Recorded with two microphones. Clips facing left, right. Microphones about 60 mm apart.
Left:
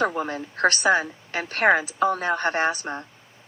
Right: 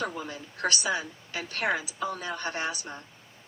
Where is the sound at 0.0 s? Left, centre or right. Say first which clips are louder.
Left 9 dB; left.